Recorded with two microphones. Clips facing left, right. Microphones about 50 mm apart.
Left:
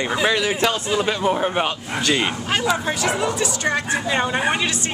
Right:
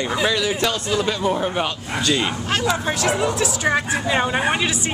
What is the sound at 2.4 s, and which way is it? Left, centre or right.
Speech, centre.